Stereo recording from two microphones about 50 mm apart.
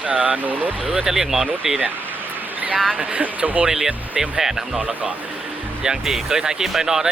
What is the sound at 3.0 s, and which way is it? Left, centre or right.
Speech, right.